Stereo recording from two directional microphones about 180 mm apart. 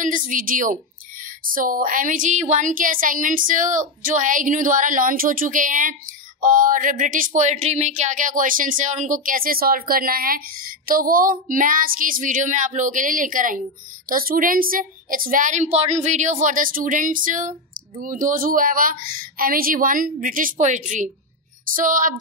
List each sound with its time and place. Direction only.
0.0 s a woman's voice: 45° right (ahead or behind)